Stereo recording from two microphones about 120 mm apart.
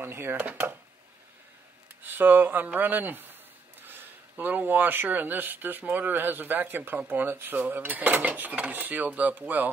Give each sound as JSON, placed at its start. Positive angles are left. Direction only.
{"t": 0.0, "sound": "speech", "side_deg": -20}
{"t": 2.0, "sound": "speech", "side_deg": -15}